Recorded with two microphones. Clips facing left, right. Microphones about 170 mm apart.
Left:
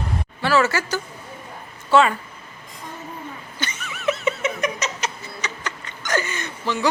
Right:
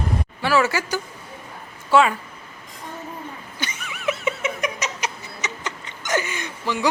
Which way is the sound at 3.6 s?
10° right (ahead or behind).